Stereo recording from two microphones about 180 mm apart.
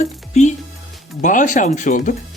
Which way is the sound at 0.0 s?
40° left (ahead or behind).